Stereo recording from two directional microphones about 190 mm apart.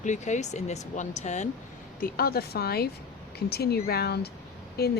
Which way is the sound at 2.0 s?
50° left (ahead or behind).